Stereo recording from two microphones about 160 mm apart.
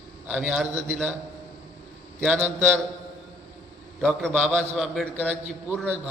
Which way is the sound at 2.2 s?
10° right (ahead or behind).